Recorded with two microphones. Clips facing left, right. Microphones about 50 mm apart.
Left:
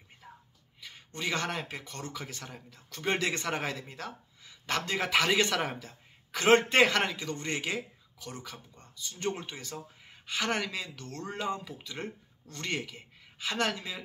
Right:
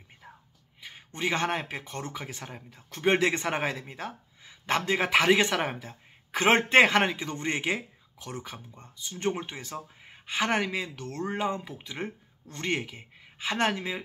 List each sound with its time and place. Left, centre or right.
0.2 s whispering: centre
0.7 s speech: right